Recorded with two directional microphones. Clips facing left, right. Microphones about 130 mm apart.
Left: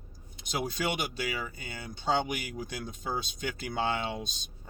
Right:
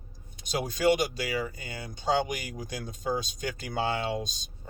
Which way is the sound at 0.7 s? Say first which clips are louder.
Right 8 dB; 40° right (ahead or behind).